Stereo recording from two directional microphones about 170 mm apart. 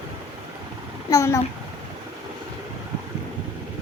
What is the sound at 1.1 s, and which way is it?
Speech, 15° left (ahead or behind).